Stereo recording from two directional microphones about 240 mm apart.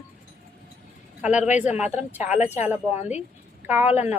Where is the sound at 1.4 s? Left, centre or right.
Left.